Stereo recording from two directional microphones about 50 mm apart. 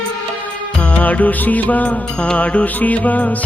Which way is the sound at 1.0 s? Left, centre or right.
Left.